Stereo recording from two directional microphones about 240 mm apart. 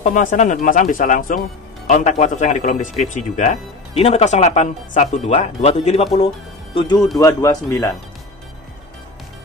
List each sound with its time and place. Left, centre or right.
0.0 s a man's voice: left; by 7.9 s centre